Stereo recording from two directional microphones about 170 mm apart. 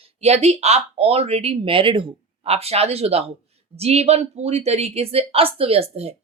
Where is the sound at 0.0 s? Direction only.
40° right (ahead or behind).